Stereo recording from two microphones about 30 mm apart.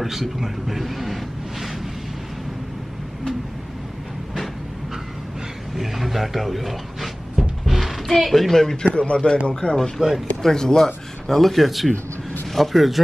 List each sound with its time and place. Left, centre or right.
0.0 s a sound: centre
5.8 s cupboard open or close: centre
8.1 s speech: centre
8.9 s a man's voice: left
9.9 s speech: centre
10.4 s speech: left
11.2 s speech: centre